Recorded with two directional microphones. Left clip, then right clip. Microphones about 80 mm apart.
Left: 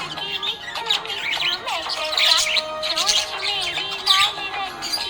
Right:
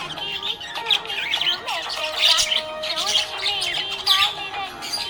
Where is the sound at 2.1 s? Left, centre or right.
Left.